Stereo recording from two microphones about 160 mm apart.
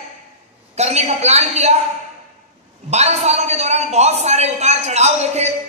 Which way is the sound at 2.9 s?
45° right (ahead or behind).